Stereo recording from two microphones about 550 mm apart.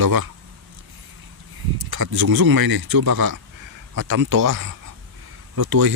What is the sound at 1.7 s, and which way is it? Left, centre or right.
Speech, right.